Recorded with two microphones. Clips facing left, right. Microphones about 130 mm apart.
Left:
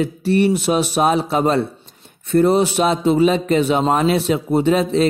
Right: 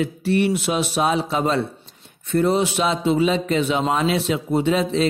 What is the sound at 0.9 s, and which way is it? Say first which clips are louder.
Speech: left 4 dB; 45° left (ahead or behind).